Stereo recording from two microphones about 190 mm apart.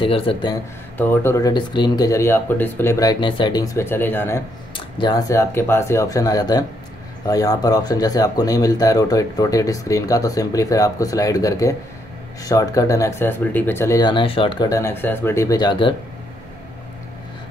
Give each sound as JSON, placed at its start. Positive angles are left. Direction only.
{"t": 0.0, "sound": "speech", "side_deg": 30}
{"t": 0.9, "sound": "speech", "side_deg": 10}
{"t": 4.7, "sound": "speech", "side_deg": 25}